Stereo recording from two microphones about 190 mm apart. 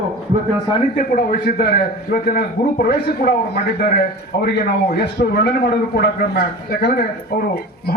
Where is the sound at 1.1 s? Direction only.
55° left (ahead or behind).